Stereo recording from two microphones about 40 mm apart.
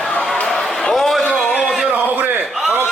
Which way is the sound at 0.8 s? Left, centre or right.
Centre.